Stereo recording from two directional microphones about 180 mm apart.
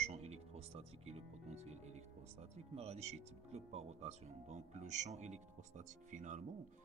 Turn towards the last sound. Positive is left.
turn(degrees=-45)  # may be behind; listen again after turning